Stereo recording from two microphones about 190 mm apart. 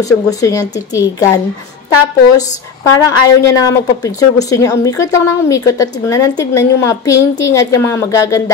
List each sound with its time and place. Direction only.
0.0 s a woman's voice: 20° left (ahead or behind)